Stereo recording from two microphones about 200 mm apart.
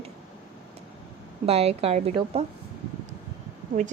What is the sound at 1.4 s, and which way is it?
A woman's voice, 30° right (ahead or behind).